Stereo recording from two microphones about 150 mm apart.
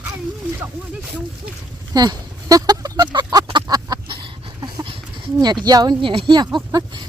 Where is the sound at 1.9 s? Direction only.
25° right (ahead or behind).